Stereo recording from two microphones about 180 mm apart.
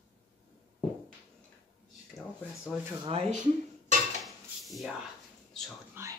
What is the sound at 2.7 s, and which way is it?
Speech, 10° left (ahead or behind).